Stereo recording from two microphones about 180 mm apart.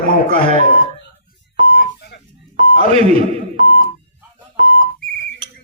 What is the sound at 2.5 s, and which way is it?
Beep, 40° right (ahead or behind).